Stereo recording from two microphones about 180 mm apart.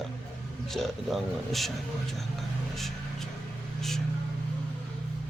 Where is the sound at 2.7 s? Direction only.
Centre (ahead or behind).